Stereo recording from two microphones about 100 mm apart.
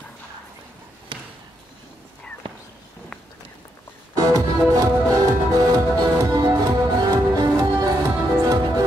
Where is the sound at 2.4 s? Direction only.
60° right (ahead or behind).